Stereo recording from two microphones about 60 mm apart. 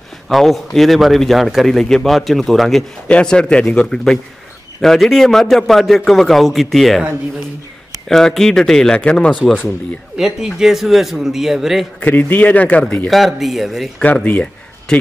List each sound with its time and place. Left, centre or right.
0.3 s speech: centre
3.1 s speech: centre
8.1 s speech: centre
9.4 s speech: centre
12.0 s a man's voice: left
13.1 s speech: centre
14.0 s speech: left
14.9 s speech: centre